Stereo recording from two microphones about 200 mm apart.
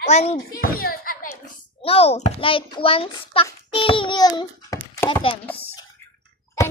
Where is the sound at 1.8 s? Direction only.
30° left (ahead or behind).